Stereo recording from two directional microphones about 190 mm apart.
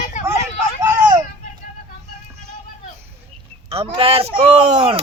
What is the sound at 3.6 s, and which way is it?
Speech, 30° right (ahead or behind).